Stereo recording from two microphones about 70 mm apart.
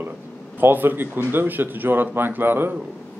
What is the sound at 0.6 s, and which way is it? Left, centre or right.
Speech, right.